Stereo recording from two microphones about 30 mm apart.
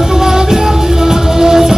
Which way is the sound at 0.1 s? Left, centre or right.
Centre.